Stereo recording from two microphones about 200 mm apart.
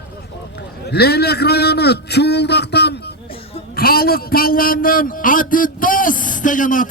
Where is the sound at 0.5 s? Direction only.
55° left (ahead or behind).